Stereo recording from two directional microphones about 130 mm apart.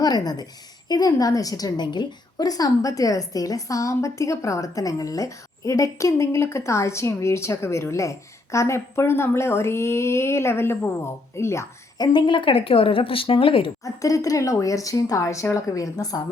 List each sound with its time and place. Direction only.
0.0 s a woman's voice: 30° left (ahead or behind)
13.8 s a woman's voice: 25° left (ahead or behind)